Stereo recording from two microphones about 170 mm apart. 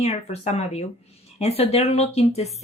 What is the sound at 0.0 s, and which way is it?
A woman's voice, 40° left (ahead or behind).